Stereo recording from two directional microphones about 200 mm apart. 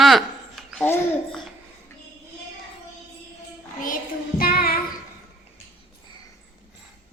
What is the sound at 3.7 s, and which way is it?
Child singing, 45° left (ahead or behind).